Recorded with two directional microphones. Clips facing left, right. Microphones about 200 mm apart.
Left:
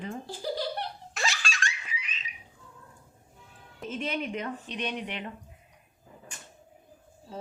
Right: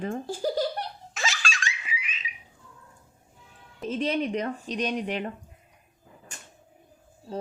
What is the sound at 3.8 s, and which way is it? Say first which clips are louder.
A woman's voice: right 6 dB; 35° right (ahead or behind).